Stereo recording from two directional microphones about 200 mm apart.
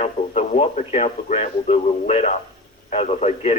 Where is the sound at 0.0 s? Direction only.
30° left (ahead or behind).